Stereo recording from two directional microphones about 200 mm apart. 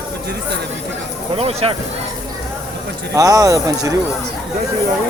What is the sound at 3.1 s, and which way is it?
Speech, 15° right (ahead or behind).